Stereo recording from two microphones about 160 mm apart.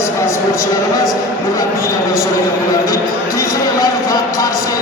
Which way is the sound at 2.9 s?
20° left (ahead or behind).